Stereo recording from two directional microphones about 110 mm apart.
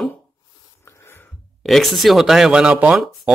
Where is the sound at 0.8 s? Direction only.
20° left (ahead or behind).